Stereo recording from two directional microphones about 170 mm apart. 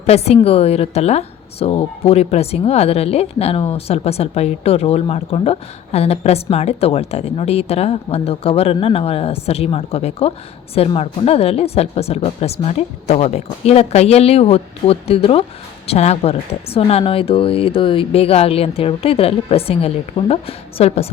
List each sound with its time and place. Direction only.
0.0 s speech: 40° left (ahead or behind)